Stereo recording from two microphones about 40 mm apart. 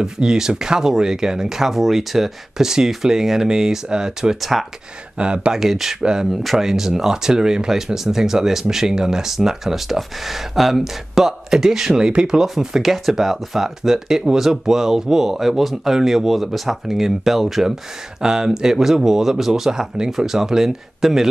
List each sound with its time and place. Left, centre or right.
0.0 s speech: centre
4.4 s speech: centre
5.1 s speech: right
5.5 s speech: centre; by 12.4 s right
12.4 s speech: centre
18.2 s speech: centre